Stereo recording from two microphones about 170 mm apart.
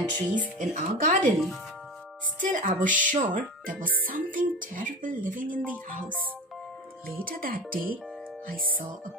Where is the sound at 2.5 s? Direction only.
50° right (ahead or behind).